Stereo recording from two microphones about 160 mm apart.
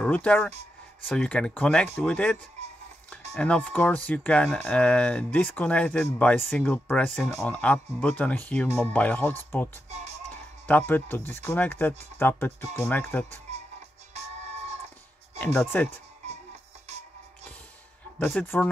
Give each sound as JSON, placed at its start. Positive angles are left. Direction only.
{"t": 0.0, "sound": "speech", "side_deg": 10}
{"t": 9.8, "sound": "speech", "side_deg": -45}
{"t": 10.7, "sound": "speech", "side_deg": 10}
{"t": 15.7, "sound": "speech", "side_deg": 10}
{"t": 18.2, "sound": "speech", "side_deg": 10}